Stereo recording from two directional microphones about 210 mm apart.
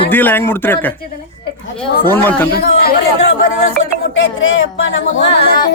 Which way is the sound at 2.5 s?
45° left (ahead or behind).